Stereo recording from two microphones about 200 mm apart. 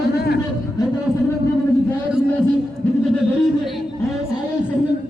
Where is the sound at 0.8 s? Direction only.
20° left (ahead or behind).